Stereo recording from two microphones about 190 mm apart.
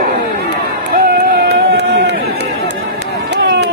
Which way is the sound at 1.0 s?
55° right (ahead or behind).